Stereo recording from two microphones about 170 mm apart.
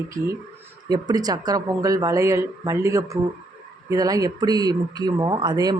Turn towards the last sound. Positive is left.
turn(degrees=-25)  # may be behind; listen again after turning